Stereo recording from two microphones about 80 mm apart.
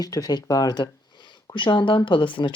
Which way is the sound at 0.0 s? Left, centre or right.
Left.